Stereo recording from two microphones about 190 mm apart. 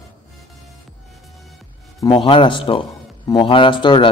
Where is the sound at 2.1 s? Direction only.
25° left (ahead or behind).